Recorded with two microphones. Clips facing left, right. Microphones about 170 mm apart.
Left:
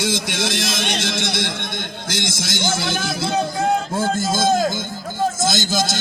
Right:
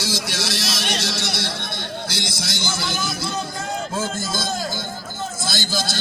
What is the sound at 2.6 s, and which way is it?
A man's voice, 55° left (ahead or behind).